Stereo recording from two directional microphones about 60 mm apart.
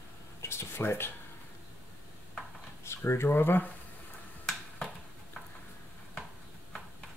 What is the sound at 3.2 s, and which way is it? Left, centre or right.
Speech, left.